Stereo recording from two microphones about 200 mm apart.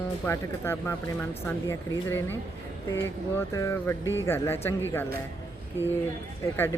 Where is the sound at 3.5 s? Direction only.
15° left (ahead or behind).